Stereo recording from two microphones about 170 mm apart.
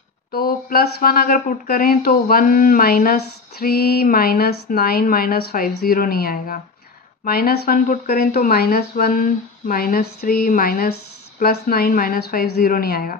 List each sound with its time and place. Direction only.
0.3 s speech: 60° left (ahead or behind)